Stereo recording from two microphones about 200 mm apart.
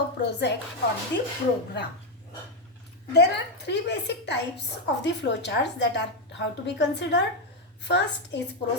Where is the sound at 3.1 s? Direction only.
55° left (ahead or behind).